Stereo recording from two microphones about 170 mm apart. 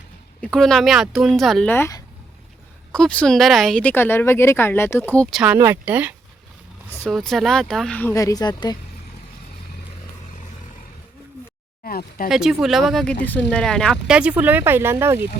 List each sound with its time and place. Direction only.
0.4 s speech: 5° left (ahead or behind)
1.7 s speech: 15° left (ahead or behind)
5.4 s speech: 10° right (ahead or behind)
7.0 s speech: centre (ahead or behind); by 8.8 s 25° left (ahead or behind)
11.8 s speech: 55° left (ahead or behind)
12.3 s speech: centre (ahead or behind)